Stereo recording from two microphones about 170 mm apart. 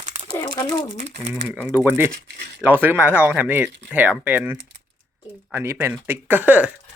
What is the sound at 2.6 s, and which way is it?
Speech, 10° right (ahead or behind).